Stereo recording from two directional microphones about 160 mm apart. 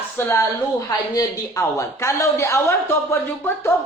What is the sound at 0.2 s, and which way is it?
A woman's voice, 15° left (ahead or behind).